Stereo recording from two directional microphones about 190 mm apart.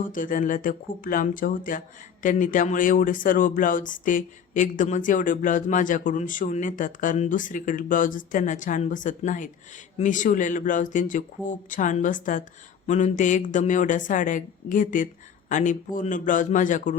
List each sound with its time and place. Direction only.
0.1 s speech: 45° left (ahead or behind)